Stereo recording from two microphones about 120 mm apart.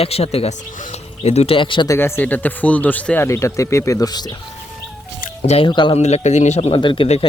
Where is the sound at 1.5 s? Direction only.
45° left (ahead or behind).